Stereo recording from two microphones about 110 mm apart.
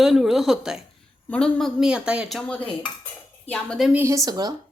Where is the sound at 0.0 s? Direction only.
5° right (ahead or behind).